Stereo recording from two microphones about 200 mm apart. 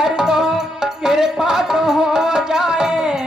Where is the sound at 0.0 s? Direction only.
5° right (ahead or behind).